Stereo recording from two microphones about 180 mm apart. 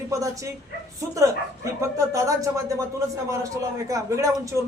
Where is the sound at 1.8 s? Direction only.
15° right (ahead or behind).